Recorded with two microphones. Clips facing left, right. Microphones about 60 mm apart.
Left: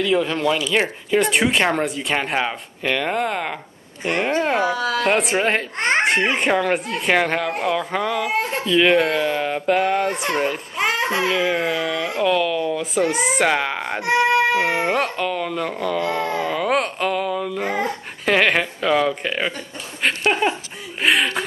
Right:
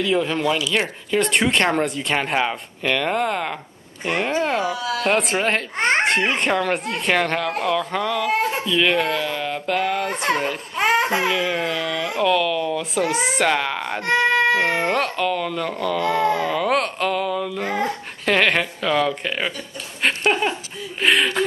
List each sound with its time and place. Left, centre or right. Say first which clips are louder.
0.0 s speech: left 1 dB; centre
0.7 s speech: left 2 dB; centre
4.6 s speech: left 3 dB; left
5.1 s speech: left 1 dB; centre